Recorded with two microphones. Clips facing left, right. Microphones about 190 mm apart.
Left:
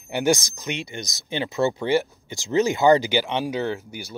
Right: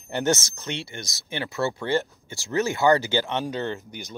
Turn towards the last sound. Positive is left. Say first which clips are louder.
# left 3 dB
turn(degrees=10)  # may be behind; listen again after turning